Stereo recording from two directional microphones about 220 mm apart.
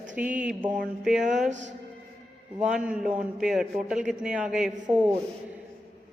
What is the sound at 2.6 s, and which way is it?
A man's voice, 5° right (ahead or behind).